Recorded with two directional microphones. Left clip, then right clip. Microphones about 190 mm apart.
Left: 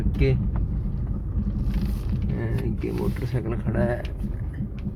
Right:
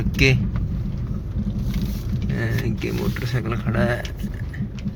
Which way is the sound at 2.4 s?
5° left (ahead or behind).